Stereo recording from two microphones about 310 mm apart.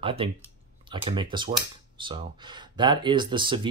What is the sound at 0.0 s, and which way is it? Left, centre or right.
Speech, centre.